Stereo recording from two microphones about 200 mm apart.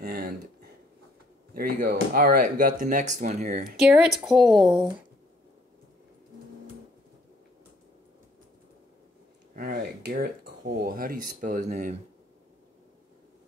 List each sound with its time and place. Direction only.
0.0 s a sound: 45° right (ahead or behind)
1.5 s speech: 50° right (ahead or behind)
3.7 s speech: 5° right (ahead or behind)
9.6 s speech: 45° right (ahead or behind)